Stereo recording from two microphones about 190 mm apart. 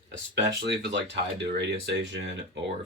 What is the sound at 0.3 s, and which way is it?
Speech, 60° right (ahead or behind).